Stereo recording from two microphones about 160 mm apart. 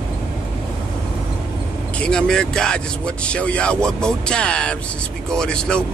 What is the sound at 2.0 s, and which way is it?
Speech, 5° left (ahead or behind).